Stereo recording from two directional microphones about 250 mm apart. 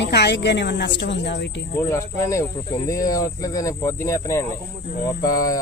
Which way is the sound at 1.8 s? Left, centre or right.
Centre.